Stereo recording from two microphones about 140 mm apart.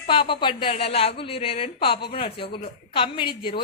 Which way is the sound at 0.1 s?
35° left (ahead or behind).